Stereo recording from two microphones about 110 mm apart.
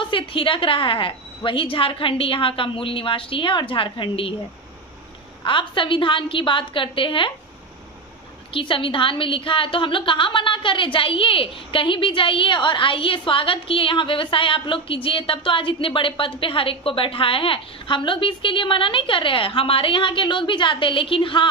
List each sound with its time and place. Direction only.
0.0 s a woman's voice: 50° left (ahead or behind)
5.4 s a woman's voice: 50° left (ahead or behind)
8.5 s a woman's voice: 50° left (ahead or behind)